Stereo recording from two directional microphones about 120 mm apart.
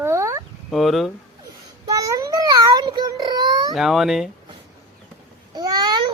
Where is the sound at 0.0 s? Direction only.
25° right (ahead or behind).